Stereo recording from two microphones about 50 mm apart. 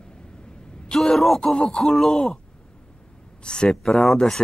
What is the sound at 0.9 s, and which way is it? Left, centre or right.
Speech, centre.